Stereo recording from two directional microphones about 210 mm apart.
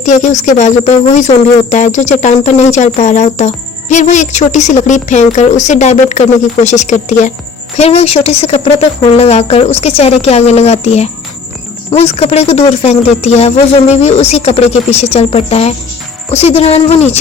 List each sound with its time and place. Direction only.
0.0 s speech: 35° left (ahead or behind)